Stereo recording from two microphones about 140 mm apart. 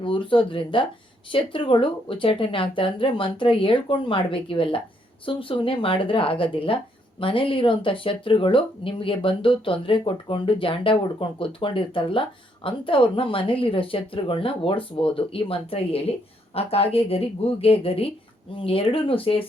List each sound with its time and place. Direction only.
0.0 s a woman's voice: 40° left (ahead or behind)